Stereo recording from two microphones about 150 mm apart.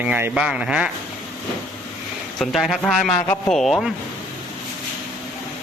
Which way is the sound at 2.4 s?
Centre (ahead or behind).